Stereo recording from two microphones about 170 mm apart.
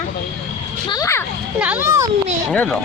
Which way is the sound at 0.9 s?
20° left (ahead or behind).